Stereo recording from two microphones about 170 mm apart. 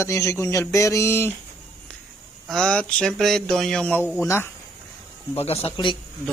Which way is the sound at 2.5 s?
5° left (ahead or behind).